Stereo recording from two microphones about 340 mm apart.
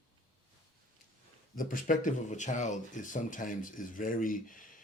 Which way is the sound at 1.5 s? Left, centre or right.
Left.